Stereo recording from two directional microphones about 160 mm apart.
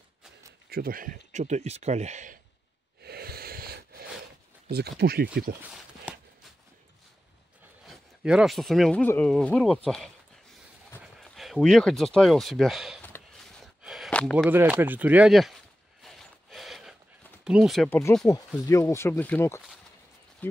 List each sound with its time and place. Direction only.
0.7 s speech: 70° right (ahead or behind); by 2.3 s 50° right (ahead or behind)
3.0 s wheeze: 80° right
4.6 s speech: 90° right; by 5.6 s 70° right (ahead or behind)
7.8 s speech: 5° right (ahead or behind)
13.8 s a sound: centre (ahead or behind)
14.5 s speech: 10° right (ahead or behind)
16.0 s a sound: centre (ahead or behind)
17.5 s speech: 5° right (ahead or behind)
17.8 s speech: 10° left (ahead or behind)
18.2 s speech: 20° left (ahead or behind)